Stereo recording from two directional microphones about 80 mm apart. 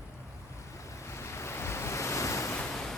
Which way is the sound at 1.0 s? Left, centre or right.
Left.